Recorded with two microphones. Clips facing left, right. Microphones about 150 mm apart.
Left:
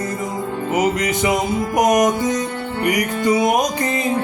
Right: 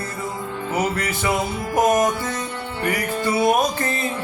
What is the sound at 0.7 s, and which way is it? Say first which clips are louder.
Music: left 5 dB; 15° left (ahead or behind).